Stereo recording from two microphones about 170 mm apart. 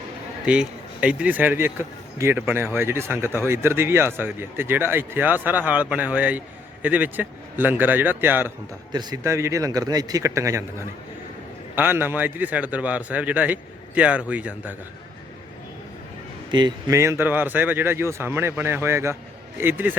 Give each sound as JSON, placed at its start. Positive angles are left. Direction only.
{"t": 0.4, "sound": "speech", "side_deg": -5}
{"t": 8.9, "sound": "a man's voice", "side_deg": -25}
{"t": 16.5, "sound": "speech", "side_deg": -25}